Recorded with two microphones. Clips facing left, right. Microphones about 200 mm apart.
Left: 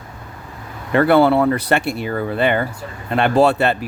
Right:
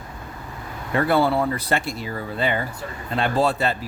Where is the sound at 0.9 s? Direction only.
70° left (ahead or behind).